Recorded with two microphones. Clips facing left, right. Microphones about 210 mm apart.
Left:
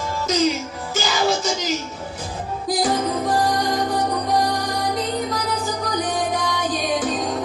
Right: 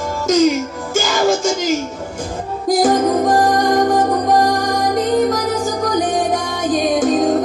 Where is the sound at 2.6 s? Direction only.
45° right (ahead or behind).